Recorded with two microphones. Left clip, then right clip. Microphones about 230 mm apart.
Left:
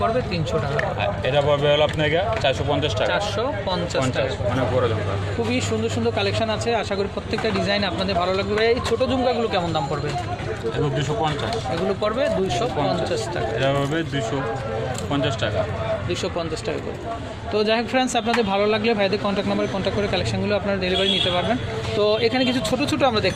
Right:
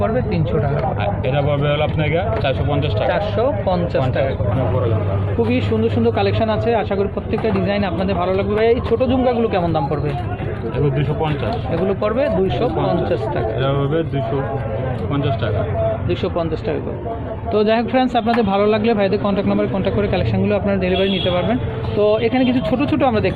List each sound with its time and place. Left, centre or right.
1.0 s speech: left
3.1 s speech: centre
5.5 s speech: centre
12.0 s speech: centre
13.6 s speech: left
17.5 s speech: centre